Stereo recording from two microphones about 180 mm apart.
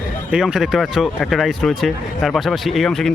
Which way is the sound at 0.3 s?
5° right (ahead or behind).